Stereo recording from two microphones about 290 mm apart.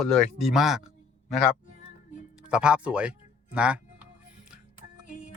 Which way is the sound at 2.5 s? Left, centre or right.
Centre.